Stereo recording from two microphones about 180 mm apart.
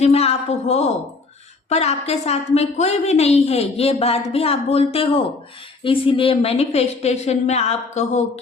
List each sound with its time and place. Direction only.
0.0 s a woman's voice: 35° left (ahead or behind)